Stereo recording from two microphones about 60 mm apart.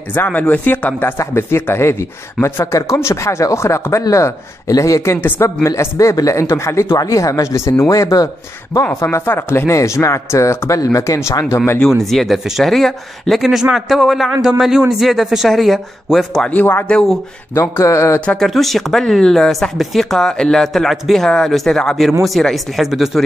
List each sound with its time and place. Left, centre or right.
0.1 s speech: left
1.1 s speech: left
2.6 s a man's voice: left
5.1 s speech: left
5.9 s a man's voice: left
7.1 s a man's voice: left
7.9 s speech: left
9.0 s speech: left
9.8 s a man's voice: left
10.8 s a man's voice: left
11.9 s speech: centre
17.6 s speech: left
18.4 s speech: centre